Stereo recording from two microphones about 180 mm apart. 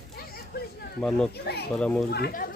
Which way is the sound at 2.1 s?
60° left (ahead or behind).